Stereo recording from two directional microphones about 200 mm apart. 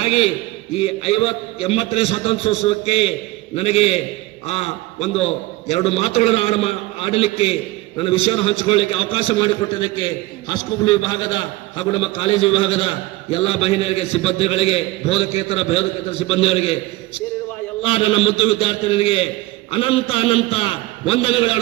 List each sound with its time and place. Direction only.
0.0 s a man's voice: 30° left (ahead or behind)
17.8 s a man's voice: 30° left (ahead or behind)